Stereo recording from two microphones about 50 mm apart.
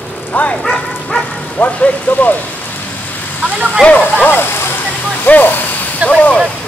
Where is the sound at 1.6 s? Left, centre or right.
Left.